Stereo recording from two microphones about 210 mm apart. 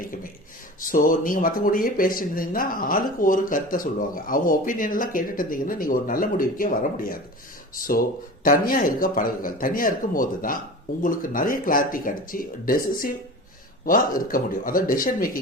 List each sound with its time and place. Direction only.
0.8 s speech: 40° left (ahead or behind)